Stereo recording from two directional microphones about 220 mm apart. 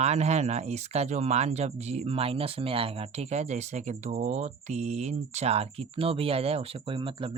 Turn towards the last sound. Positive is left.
turn(degrees=-25)  # may be behind; listen again after turning